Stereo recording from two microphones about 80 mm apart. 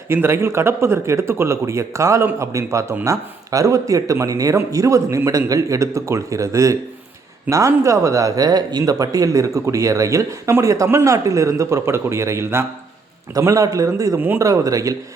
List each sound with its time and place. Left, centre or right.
0.1 s a man's voice: right